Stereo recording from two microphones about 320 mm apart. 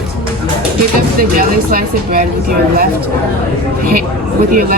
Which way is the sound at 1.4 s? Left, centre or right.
Right.